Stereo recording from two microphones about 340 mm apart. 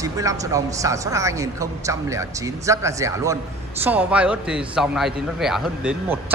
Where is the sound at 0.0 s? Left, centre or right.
Centre.